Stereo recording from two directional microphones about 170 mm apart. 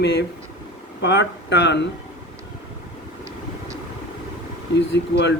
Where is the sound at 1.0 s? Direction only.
90° left.